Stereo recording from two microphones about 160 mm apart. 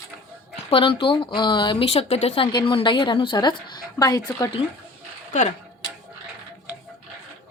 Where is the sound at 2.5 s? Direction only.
30° left (ahead or behind).